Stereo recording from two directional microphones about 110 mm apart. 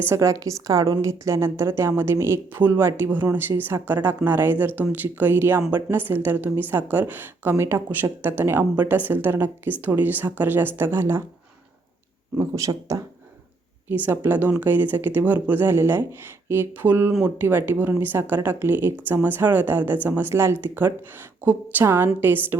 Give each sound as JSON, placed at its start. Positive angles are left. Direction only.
{"t": 0.0, "sound": "a woman's voice", "side_deg": -25}
{"t": 12.4, "sound": "speech", "side_deg": -30}
{"t": 13.8, "sound": "a woman's voice", "side_deg": -15}